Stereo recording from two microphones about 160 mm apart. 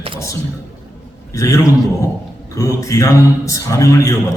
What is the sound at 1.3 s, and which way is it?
A man's voice, 20° left (ahead or behind).